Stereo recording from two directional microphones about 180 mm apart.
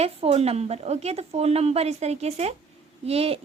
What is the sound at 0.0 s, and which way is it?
A woman's voice, 35° right (ahead or behind).